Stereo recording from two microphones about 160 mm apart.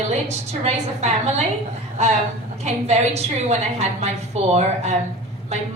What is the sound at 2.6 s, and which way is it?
A woman's voice, 45° right (ahead or behind).